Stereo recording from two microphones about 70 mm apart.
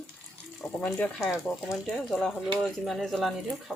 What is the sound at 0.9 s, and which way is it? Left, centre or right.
Speech, left.